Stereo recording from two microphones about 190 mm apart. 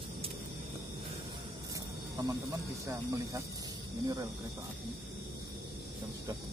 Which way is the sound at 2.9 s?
15° right (ahead or behind).